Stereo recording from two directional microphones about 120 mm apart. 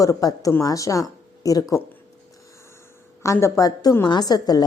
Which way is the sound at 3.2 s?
25° left (ahead or behind).